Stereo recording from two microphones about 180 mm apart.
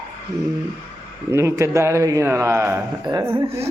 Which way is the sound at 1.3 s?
15° right (ahead or behind).